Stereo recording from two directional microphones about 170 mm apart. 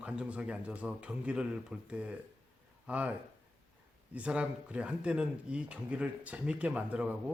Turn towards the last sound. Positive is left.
turn(degrees=-10)  # may be behind; listen again after turning